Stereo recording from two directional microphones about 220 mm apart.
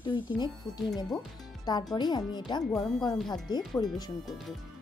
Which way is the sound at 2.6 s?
Centre (ahead or behind).